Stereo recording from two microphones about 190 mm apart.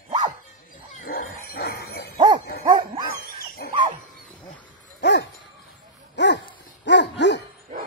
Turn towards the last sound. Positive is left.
turn(degrees=65)  # may be behind; listen again after turning